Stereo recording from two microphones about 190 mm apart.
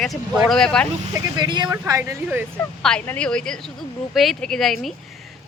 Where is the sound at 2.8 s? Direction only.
5° left (ahead or behind).